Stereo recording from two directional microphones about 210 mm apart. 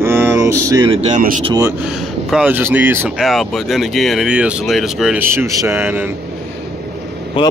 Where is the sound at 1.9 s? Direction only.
5° right (ahead or behind).